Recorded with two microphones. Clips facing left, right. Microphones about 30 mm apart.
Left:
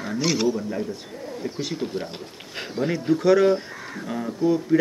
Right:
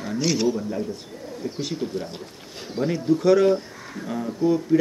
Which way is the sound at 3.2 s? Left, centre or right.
Centre.